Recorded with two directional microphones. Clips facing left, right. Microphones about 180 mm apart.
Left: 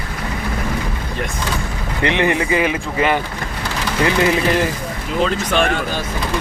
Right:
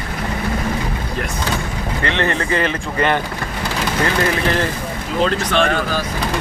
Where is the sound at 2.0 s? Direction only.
15° left (ahead or behind).